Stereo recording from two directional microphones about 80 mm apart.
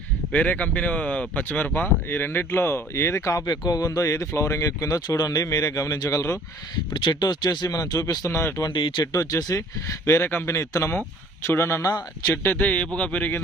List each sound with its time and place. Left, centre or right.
0.3 s speech: centre; by 3.4 s left
3.4 s speech: left
6.9 s speech: left
8.3 s speech: left
8.7 s speech: left
9.1 s speech: left
10.5 s speech: left
11.9 s speech: left
12.3 s speech: left